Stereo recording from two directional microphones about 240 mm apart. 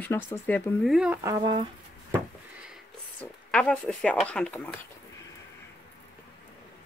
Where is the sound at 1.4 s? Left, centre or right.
Right.